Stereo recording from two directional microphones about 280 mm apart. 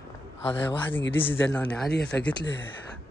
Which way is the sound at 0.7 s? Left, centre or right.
Centre.